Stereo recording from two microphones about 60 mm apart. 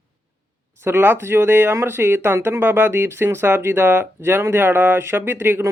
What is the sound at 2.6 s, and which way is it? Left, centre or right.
Speech, right.